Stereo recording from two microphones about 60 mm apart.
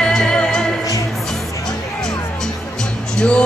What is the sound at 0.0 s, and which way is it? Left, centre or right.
Music, centre.